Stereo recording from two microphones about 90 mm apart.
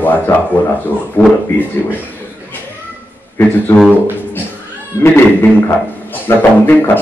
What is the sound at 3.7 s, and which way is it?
Speech, 25° left (ahead or behind).